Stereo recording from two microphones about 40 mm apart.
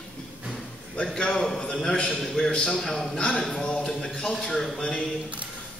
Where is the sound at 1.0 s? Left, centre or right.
Left.